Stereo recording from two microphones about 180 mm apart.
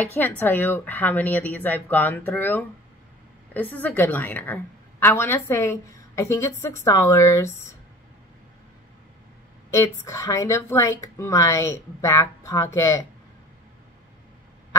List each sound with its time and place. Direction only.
0.0 s speech: 10° left (ahead or behind)
9.7 s speech: 15° left (ahead or behind)